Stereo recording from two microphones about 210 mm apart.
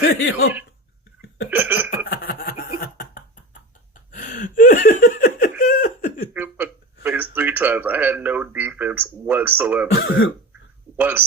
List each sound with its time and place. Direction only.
0.0 s speech: 55° left (ahead or behind)
1.5 s a sound: 10° right (ahead or behind)
2.0 s a sound: 45° left (ahead or behind)
4.1 s laughter: 40° left (ahead or behind)
6.3 s a man's voice: 10° right (ahead or behind)
9.9 s speech: 50° left (ahead or behind)
10.9 s speech: 10° right (ahead or behind)